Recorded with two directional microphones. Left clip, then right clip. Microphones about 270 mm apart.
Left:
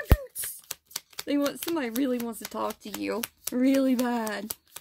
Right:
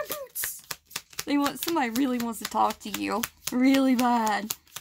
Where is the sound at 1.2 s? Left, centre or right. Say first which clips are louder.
Right 1 dB; centre.